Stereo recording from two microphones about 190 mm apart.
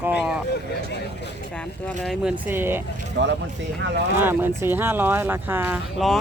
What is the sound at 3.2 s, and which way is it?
Speech, 70° right (ahead or behind).